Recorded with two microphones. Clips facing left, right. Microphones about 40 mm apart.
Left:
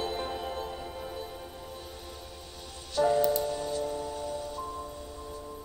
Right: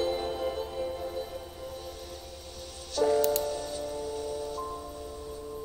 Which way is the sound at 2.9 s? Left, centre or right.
Centre.